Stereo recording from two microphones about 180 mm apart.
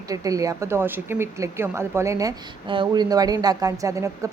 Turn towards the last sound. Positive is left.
turn(degrees=-15)  # may be behind; listen again after turning